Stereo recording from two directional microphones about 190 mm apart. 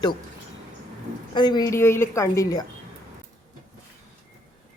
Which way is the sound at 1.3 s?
20° left (ahead or behind).